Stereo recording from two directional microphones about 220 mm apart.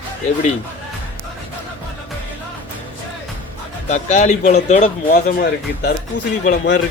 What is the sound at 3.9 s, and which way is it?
Speech, 35° left (ahead or behind).